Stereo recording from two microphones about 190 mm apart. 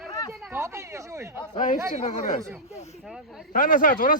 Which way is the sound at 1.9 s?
40° left (ahead or behind).